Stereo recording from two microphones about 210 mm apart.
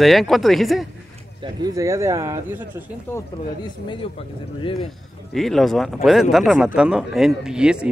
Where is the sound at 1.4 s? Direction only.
15° right (ahead or behind).